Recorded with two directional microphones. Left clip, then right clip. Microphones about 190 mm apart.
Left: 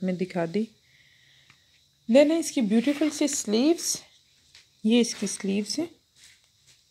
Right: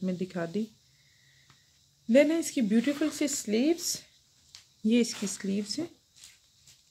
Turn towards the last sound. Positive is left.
turn(degrees=15)  # may be behind; listen again after turning